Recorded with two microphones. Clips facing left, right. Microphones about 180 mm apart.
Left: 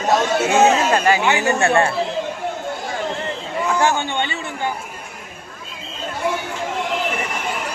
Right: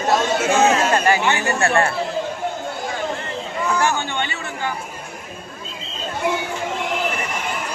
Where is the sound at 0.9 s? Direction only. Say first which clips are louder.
Left 1 dB; 15° left (ahead or behind).